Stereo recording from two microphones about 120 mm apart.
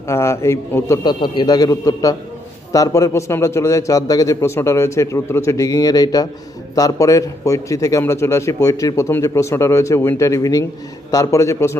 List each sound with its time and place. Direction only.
0.1 s a man's voice: 25° left (ahead or behind)
1.0 s a man's voice: 40° left (ahead or behind)